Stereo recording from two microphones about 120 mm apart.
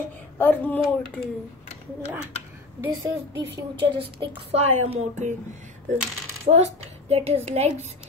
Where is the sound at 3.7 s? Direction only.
45° right (ahead or behind).